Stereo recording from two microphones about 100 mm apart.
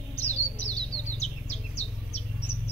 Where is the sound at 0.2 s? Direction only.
15° left (ahead or behind).